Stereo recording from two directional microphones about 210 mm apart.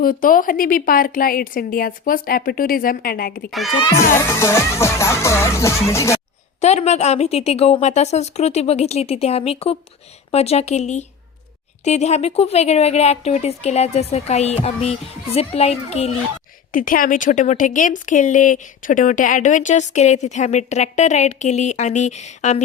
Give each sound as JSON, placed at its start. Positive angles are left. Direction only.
{"t": 0.0, "sound": "a woman's voice", "side_deg": 40}
{"t": 3.5, "sound": "speech", "side_deg": 0}
{"t": 3.8, "sound": "music", "side_deg": 15}
{"t": 6.6, "sound": "speech", "side_deg": 30}
{"t": 16.7, "sound": "speech", "side_deg": 40}